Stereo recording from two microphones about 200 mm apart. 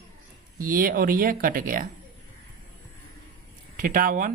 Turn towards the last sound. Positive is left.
turn(degrees=-45)  # may be behind; listen again after turning